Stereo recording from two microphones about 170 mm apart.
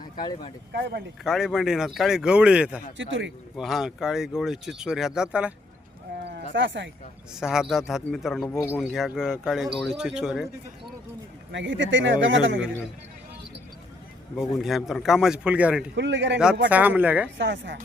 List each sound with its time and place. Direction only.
0.0 s speech: 25° left (ahead or behind)
0.7 s speech: 75° right (ahead or behind)
1.2 s speech: 5° right (ahead or behind)
3.0 s speech: 90° right
3.6 s speech: centre (ahead or behind)
6.2 s speech: 85° right
7.3 s speech: 5° right (ahead or behind)
11.5 s speech: 90° right
14.3 s speech: centre (ahead or behind)
16.0 s speech: 90° right
16.6 s speech: 10° right (ahead or behind)
17.3 s speech: 90° right